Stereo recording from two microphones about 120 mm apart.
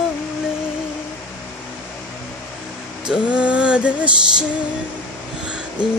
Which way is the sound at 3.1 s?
10° right (ahead or behind).